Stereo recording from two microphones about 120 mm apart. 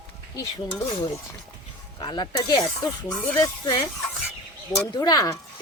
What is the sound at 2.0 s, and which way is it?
Speech, 40° left (ahead or behind).